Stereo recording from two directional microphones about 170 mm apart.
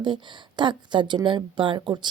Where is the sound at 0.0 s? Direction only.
25° right (ahead or behind).